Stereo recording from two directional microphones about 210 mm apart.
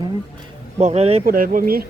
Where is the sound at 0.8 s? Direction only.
30° right (ahead or behind).